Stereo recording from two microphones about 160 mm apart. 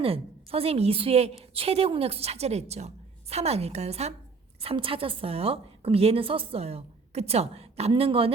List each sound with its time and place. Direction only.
0.0 s a woman's voice: 35° right (ahead or behind)